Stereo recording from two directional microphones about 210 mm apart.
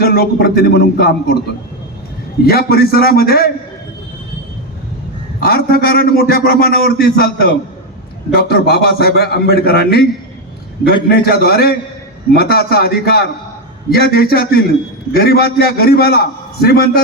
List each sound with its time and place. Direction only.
0.0 s a man's voice: 45° left (ahead or behind)
2.5 s a man's voice: 45° left (ahead or behind)
5.4 s a man's voice: 45° left (ahead or behind)